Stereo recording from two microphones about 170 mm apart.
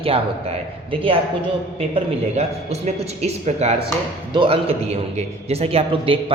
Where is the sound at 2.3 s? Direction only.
40° right (ahead or behind).